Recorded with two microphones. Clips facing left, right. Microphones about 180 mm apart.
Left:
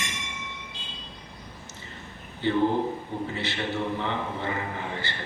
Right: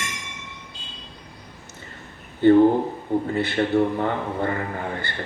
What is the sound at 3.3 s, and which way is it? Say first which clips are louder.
Speech: right 10 dB; 55° right (ahead or behind).